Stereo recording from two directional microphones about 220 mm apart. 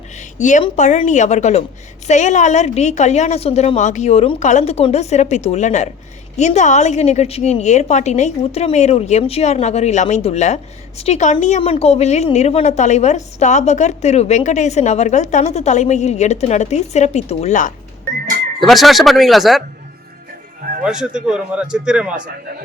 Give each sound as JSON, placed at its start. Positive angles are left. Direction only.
{"t": 0.2, "sound": "a sound", "side_deg": 35}
{"t": 0.6, "sound": "a woman's voice", "side_deg": 35}
{"t": 18.6, "sound": "speech", "side_deg": 0}
{"t": 20.8, "sound": "speech", "side_deg": -5}